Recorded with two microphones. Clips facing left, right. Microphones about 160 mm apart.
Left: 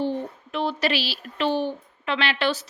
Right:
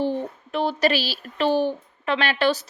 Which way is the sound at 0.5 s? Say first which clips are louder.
Right 3 dB; 40° right (ahead or behind).